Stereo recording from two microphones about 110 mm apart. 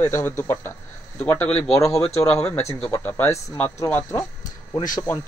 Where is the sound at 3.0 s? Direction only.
15° left (ahead or behind).